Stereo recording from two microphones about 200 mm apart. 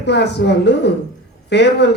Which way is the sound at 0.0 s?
60° left (ahead or behind).